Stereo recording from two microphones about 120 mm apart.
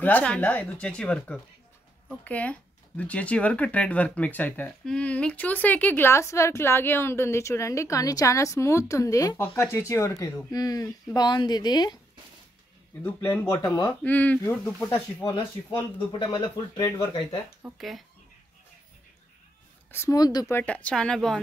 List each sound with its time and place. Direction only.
0.0 s speech: 10° left (ahead or behind); by 12.0 s 35° left (ahead or behind)
13.0 s speech: 15° left (ahead or behind)
13.5 s speech: 25° left (ahead or behind)
14.0 s speech: 15° left (ahead or behind)
15.2 s speech: 35° left (ahead or behind)
17.7 s speech: centre (ahead or behind)
19.9 s speech: 20° left (ahead or behind)
20.2 s speech: 35° left (ahead or behind)
20.4 s speech: 15° left (ahead or behind)